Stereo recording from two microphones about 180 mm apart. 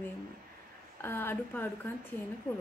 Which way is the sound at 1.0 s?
15° left (ahead or behind).